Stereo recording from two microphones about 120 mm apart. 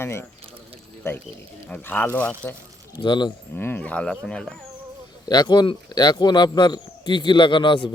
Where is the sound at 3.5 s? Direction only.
15° left (ahead or behind).